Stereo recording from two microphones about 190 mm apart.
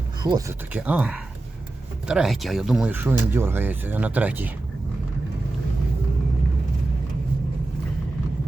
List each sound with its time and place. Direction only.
0.2 s speech: 20° right (ahead or behind)
0.7 s speech: 5° right (ahead or behind)